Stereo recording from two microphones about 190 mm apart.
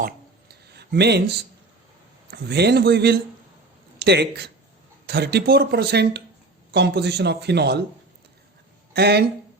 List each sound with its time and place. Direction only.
0.0 s a sound: 60° right (ahead or behind)
2.3 s speech: 60° right (ahead or behind)
8.9 s speech: 60° right (ahead or behind)